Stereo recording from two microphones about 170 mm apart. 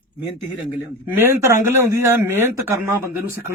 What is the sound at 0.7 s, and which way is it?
Speech, 15° right (ahead or behind).